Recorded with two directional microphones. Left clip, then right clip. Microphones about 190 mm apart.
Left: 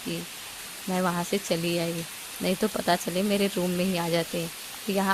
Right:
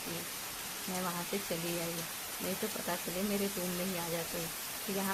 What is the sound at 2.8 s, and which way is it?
Speech, 50° left (ahead or behind).